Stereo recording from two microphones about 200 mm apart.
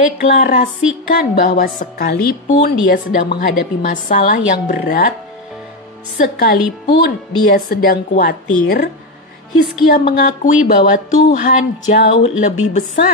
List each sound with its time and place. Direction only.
0.2 s a woman's voice: 40° left (ahead or behind)
6.2 s a woman's voice: 50° left (ahead or behind)
10.0 s speech: 45° left (ahead or behind)